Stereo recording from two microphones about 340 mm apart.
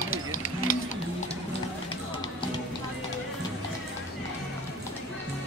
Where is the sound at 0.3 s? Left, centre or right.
Left.